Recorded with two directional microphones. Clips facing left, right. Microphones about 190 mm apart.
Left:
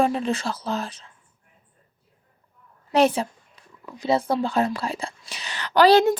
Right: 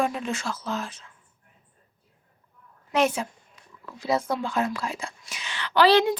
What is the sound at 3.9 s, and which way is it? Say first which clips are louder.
Speech: left 4 dB; 20° left (ahead or behind).